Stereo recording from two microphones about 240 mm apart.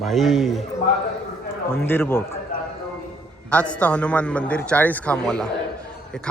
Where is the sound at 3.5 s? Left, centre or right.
Centre.